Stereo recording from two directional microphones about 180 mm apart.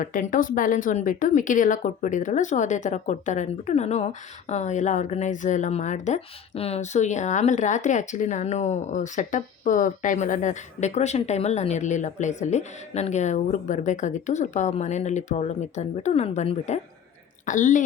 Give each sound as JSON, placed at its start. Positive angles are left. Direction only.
{"t": 0.0, "sound": "a woman's voice", "side_deg": 50}